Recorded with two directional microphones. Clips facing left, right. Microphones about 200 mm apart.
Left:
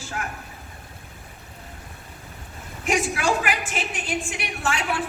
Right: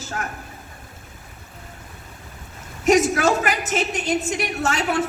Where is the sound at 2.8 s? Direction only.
40° right (ahead or behind).